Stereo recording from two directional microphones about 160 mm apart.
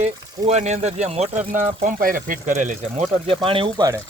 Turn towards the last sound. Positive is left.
turn(degrees=-30)  # may be behind; listen again after turning